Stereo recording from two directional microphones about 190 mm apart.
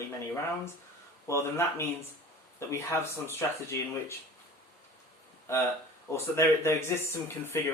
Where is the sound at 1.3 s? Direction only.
15° left (ahead or behind).